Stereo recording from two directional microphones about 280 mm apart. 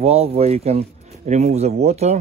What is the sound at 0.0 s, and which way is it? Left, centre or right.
Speech, right.